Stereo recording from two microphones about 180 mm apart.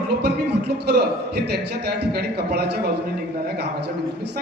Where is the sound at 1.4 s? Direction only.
65° right (ahead or behind).